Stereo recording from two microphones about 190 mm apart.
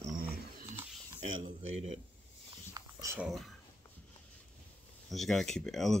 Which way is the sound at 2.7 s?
15° right (ahead or behind).